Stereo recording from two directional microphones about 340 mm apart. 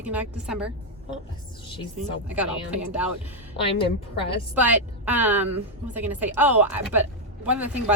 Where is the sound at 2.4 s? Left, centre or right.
Centre.